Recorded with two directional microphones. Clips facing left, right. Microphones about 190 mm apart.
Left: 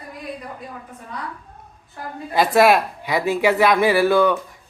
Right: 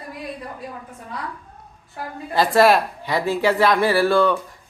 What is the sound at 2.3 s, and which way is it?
Speech, 15° left (ahead or behind).